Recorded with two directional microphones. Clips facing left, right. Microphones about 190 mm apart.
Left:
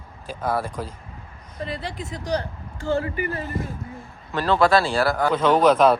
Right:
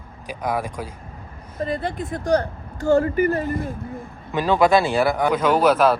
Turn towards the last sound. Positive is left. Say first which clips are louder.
# left 1 dB
turn(degrees=-5)  # may be behind; listen again after turning